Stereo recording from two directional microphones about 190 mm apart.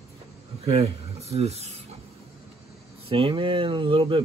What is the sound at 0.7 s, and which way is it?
Speech, 30° right (ahead or behind).